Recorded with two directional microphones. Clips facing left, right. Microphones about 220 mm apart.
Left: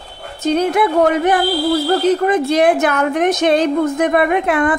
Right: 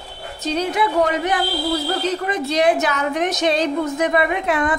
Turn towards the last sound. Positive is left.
turn(degrees=55)  # may be behind; listen again after turning